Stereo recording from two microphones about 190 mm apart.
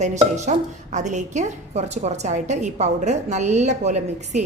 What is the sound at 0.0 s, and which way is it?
A woman's voice, 40° right (ahead or behind).